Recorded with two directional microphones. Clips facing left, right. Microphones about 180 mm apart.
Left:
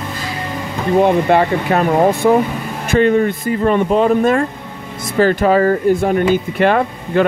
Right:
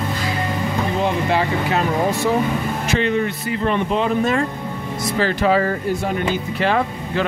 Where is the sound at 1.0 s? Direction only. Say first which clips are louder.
Left 9 dB; 55° left (ahead or behind).